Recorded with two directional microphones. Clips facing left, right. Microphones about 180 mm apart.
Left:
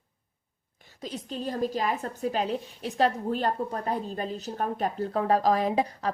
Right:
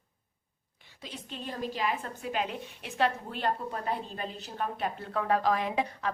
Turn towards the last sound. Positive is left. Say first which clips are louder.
# left 5 dB
turn(degrees=35)  # may be behind; listen again after turning